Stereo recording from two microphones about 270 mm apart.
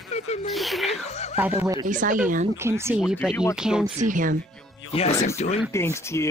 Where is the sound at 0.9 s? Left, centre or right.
Left.